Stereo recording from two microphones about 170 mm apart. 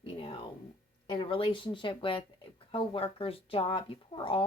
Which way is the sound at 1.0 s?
30° left (ahead or behind).